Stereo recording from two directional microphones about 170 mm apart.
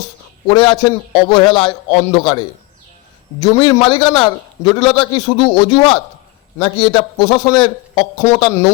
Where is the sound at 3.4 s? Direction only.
25° left (ahead or behind).